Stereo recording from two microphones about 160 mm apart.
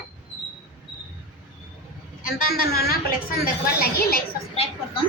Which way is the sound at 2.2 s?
65° left (ahead or behind).